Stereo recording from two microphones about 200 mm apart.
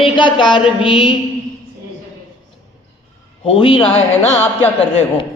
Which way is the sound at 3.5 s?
25° left (ahead or behind).